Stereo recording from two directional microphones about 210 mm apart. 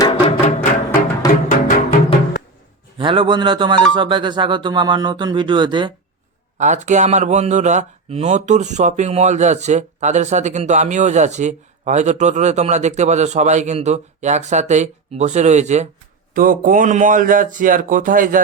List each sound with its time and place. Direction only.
0.0 s music: 30° left (ahead or behind)
3.0 s speech: 25° right (ahead or behind)
6.6 s speech: 35° right (ahead or behind)